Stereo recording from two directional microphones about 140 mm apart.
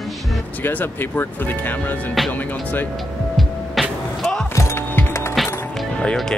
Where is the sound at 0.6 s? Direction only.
15° left (ahead or behind).